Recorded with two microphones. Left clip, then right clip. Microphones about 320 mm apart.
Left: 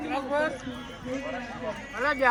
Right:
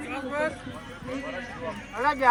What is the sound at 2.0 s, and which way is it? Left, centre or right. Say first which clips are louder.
Speech: right 1 dB; centre.